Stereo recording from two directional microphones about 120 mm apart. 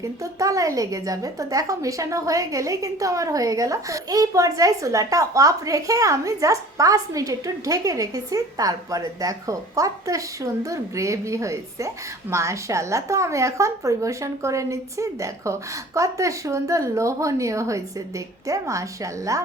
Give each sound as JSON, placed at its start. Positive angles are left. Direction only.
{"t": 0.0, "sound": "a woman's voice", "side_deg": -25}